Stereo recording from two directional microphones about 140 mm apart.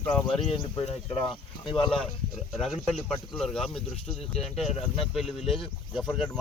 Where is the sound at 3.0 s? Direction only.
Centre (ahead or behind).